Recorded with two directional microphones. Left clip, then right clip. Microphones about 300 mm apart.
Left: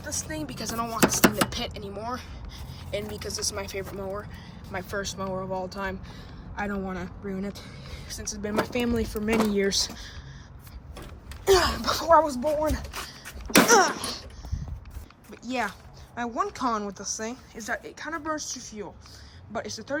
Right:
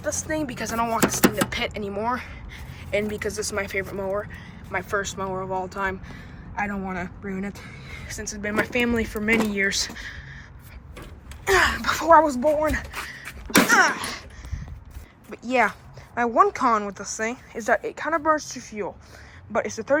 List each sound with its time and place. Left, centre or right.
0.2 s speech: centre
11.4 s speech: centre
11.9 s speech: centre
13.7 s a sound: centre
15.3 s speech: centre